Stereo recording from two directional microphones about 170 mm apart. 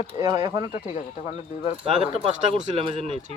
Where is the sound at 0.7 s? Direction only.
45° left (ahead or behind).